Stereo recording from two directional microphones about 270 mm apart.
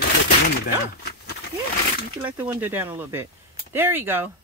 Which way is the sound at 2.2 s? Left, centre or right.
Centre.